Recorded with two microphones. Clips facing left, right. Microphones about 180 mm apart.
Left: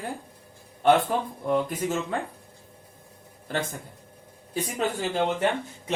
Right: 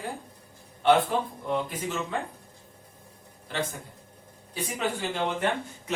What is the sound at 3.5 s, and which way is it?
Speech, 45° left (ahead or behind).